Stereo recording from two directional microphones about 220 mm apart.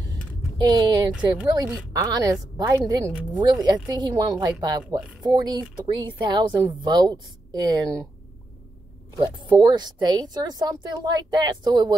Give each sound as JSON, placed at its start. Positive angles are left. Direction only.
{"t": 0.6, "sound": "a woman's voice", "side_deg": -20}
{"t": 9.2, "sound": "a woman's voice", "side_deg": -20}